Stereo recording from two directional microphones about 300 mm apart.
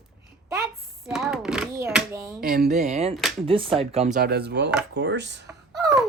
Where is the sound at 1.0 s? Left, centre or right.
Centre.